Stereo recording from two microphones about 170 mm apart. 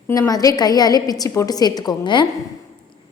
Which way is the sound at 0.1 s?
20° left (ahead or behind).